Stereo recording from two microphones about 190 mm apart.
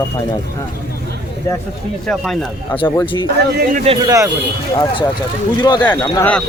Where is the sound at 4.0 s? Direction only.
20° right (ahead or behind).